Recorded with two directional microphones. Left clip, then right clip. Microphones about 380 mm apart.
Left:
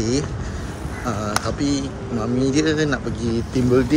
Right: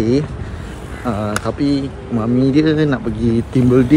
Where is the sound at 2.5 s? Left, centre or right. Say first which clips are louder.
Right 5 dB; centre.